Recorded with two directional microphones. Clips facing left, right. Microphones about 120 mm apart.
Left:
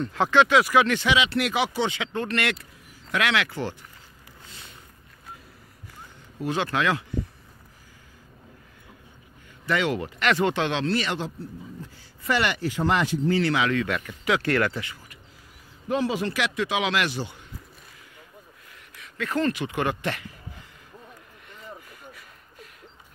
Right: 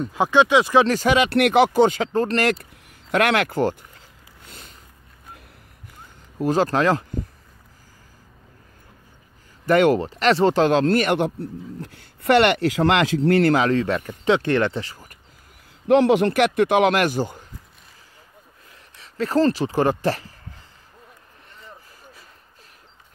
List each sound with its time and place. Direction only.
0.0 s speech: 15° right (ahead or behind); by 2.6 s 35° right (ahead or behind)
2.6 s speech: 50° right (ahead or behind)
4.5 s a sound: 45° right (ahead or behind)
6.3 s speech: 40° right (ahead or behind)
9.7 s speech: 50° right (ahead or behind)
9.9 s speech: 35° right (ahead or behind); by 13.5 s 70° right (ahead or behind)
13.5 s speech: 40° right (ahead or behind)
15.9 s speech: 65° right (ahead or behind); by 17.5 s 45° right (ahead or behind)
18.9 s speech: 35° right (ahead or behind)